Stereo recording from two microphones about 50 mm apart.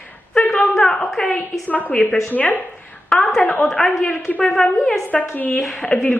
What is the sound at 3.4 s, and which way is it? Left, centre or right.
Speech, left.